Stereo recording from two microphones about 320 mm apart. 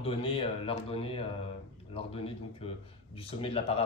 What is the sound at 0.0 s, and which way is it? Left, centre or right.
Speech, centre.